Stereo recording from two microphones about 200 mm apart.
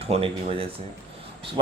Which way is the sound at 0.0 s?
30° right (ahead or behind).